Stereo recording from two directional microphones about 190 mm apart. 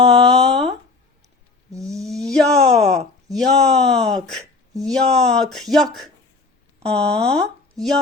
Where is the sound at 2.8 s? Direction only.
35° right (ahead or behind).